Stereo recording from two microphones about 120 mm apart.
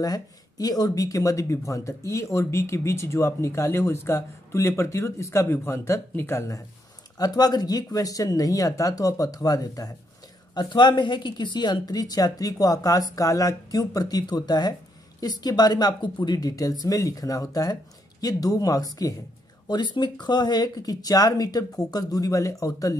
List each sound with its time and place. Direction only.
0.0 s speech: 30° left (ahead or behind)
7.2 s speech: 35° left (ahead or behind)